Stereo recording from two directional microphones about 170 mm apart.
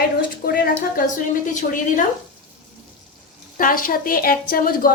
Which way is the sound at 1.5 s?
50° left (ahead or behind).